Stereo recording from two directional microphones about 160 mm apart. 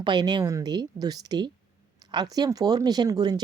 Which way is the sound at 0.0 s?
25° right (ahead or behind).